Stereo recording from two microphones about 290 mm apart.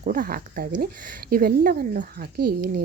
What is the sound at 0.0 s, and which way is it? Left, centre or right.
Speech, right.